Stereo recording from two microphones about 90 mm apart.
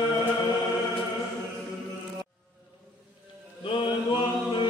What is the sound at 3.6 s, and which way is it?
Chant, 60° left (ahead or behind).